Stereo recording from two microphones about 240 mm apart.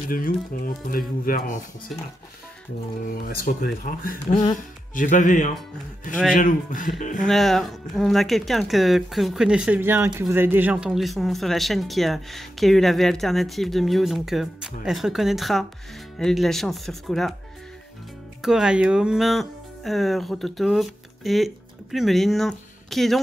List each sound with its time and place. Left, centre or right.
0.8 s speech: left
3.1 s speech: left
7.2 s speech: centre
18.4 s speech: centre